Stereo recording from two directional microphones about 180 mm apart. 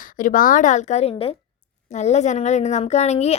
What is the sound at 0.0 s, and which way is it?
A woman's voice, 50° left (ahead or behind).